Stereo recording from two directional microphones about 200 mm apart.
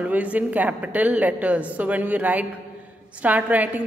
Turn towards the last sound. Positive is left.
turn(degrees=-10)  # may be behind; listen again after turning